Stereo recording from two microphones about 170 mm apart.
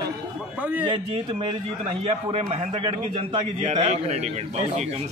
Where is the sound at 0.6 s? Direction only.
10° right (ahead or behind).